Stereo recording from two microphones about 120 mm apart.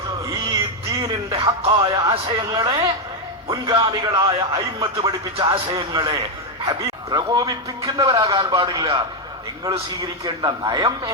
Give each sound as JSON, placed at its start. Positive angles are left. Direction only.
{"t": 0.3, "sound": "music", "side_deg": -25}
{"t": 3.7, "sound": "speech", "side_deg": -40}
{"t": 10.0, "sound": "speech", "side_deg": -35}